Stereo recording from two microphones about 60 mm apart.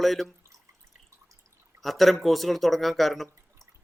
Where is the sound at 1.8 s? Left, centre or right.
Centre.